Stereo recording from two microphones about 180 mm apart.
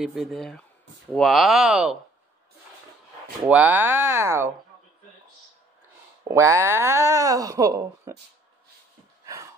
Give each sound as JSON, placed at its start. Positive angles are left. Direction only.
{"t": 0.0, "sound": "speech", "side_deg": 0}
{"t": 3.4, "sound": "speech", "side_deg": -10}
{"t": 6.2, "sound": "speech", "side_deg": -15}
{"t": 9.2, "sound": "a sound", "side_deg": -20}